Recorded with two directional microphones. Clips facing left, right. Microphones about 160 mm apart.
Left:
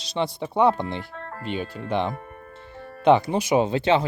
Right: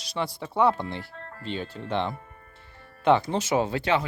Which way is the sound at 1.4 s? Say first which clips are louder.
Left 3 dB; 15° left (ahead or behind).